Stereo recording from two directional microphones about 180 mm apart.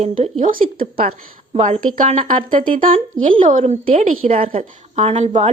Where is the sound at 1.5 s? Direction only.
40° right (ahead or behind).